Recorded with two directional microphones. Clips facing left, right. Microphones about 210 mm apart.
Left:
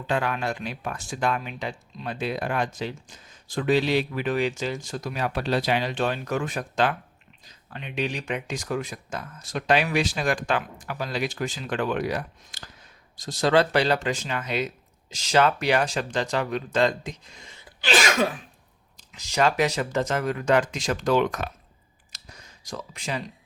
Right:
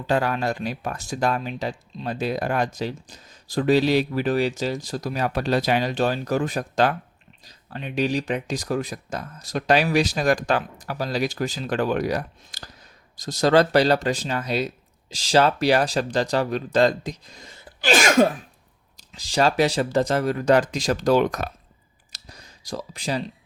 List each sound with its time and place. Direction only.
0.1 s speech: 35° right (ahead or behind)
18.9 s speech: 35° right (ahead or behind)
22.1 s a sound: 35° right (ahead or behind)